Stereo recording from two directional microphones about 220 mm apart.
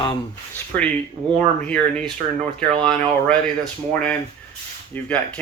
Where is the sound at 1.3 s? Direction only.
5° left (ahead or behind).